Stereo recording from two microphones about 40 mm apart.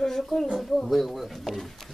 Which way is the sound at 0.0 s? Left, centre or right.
Centre.